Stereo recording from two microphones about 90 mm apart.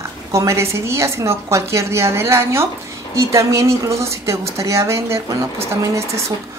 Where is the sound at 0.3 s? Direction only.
35° right (ahead or behind).